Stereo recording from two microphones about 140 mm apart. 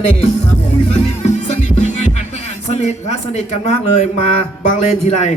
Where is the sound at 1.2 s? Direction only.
55° left (ahead or behind).